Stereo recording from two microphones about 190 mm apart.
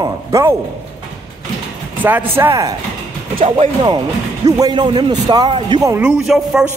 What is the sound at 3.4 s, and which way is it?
Speech, 25° right (ahead or behind).